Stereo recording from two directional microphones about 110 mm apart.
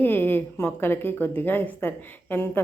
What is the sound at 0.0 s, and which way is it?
Speech, 20° left (ahead or behind).